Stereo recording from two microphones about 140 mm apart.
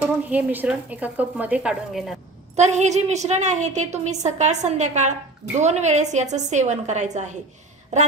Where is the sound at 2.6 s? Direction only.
55° right (ahead or behind).